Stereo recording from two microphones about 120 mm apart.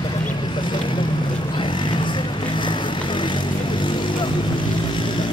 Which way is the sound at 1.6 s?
40° left (ahead or behind).